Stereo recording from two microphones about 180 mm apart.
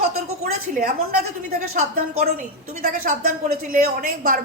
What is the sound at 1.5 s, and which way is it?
A woman's voice, 55° right (ahead or behind).